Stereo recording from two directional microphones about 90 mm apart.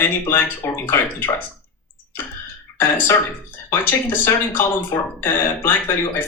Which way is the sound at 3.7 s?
25° left (ahead or behind).